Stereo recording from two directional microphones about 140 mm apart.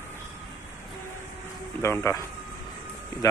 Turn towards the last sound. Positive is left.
turn(degrees=25)  # may be behind; listen again after turning